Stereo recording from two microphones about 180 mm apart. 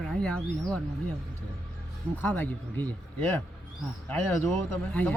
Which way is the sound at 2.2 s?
10° left (ahead or behind).